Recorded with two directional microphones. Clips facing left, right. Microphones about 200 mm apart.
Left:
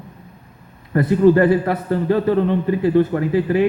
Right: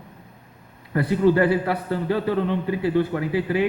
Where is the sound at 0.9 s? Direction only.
45° left (ahead or behind).